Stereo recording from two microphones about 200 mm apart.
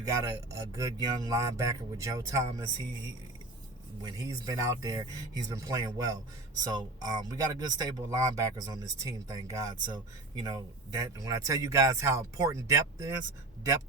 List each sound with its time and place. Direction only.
0.0 s speech: 15° right (ahead or behind)
4.0 s speech: 20° right (ahead or behind)